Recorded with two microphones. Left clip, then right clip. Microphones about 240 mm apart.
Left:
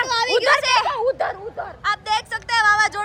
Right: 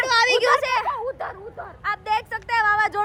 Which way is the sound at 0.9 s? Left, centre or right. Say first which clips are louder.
Left 6 dB; left.